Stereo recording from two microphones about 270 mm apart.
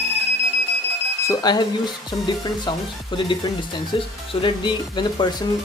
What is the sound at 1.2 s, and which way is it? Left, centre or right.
Speech, centre.